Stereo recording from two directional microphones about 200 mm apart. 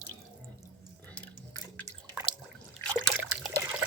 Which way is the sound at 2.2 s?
5° right (ahead or behind).